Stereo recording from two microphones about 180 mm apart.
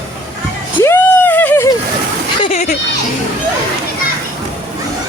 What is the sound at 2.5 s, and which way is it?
Children playing, 45° left (ahead or behind).